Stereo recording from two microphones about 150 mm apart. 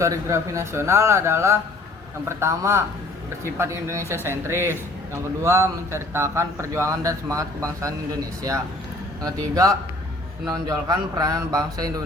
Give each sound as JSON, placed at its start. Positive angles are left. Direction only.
{"t": 0.0, "sound": "speech", "side_deg": -20}
{"t": 9.2, "sound": "speech", "side_deg": -20}